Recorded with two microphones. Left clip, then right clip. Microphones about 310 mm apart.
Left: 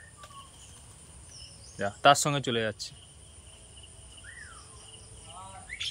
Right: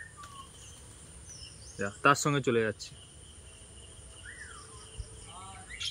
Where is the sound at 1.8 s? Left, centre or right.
Centre.